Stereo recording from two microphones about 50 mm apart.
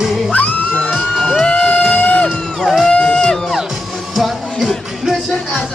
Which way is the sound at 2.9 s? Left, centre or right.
Centre.